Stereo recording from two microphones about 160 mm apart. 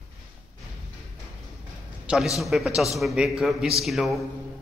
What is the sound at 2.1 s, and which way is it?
A man's voice, centre (ahead or behind).